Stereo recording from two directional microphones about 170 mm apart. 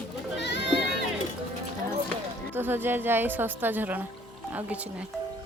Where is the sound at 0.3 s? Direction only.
90° left.